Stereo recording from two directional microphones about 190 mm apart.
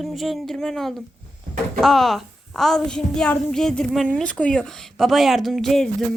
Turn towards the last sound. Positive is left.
turn(degrees=0)  # may be behind; listen again after turning